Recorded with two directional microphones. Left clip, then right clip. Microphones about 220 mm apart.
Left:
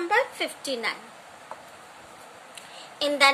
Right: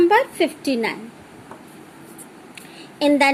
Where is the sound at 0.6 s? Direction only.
20° left (ahead or behind).